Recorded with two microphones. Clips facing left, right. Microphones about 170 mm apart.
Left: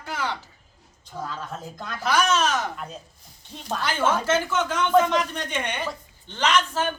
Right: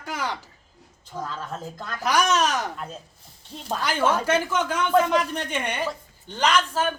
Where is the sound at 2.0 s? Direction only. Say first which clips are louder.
Even; 15° right (ahead or behind).